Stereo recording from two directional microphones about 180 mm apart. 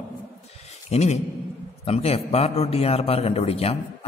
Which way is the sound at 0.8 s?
35° left (ahead or behind).